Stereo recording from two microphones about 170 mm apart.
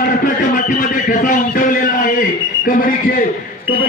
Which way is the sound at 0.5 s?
50° left (ahead or behind).